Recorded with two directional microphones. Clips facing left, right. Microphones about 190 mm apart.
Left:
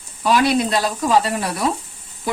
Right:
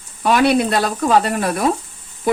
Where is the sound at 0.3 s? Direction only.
55° right (ahead or behind).